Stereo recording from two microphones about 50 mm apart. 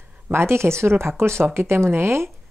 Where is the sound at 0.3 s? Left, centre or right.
Right.